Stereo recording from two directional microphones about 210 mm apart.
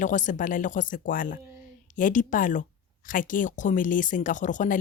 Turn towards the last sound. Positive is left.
turn(degrees=35)  # may be behind; listen again after turning